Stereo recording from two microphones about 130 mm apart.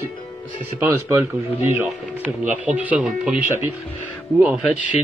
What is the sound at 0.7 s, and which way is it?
Speech, 20° right (ahead or behind).